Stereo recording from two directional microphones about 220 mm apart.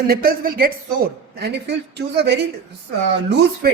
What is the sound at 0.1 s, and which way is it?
A woman's voice, 40° right (ahead or behind).